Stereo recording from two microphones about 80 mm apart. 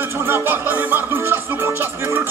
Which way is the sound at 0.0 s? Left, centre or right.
Right.